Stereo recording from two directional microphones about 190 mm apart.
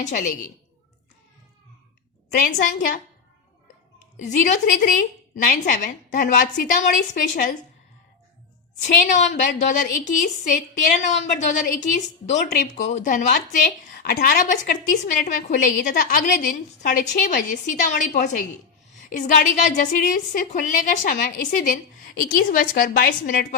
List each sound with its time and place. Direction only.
0.0 s a woman's voice: 40° left (ahead or behind)
2.6 s a woman's voice: 45° left (ahead or behind)
4.2 s a woman's voice: 40° left (ahead or behind)
8.8 s a woman's voice: 40° left (ahead or behind)
19.0 s a sound: 40° left (ahead or behind)
19.7 s a woman's voice: 45° left (ahead or behind)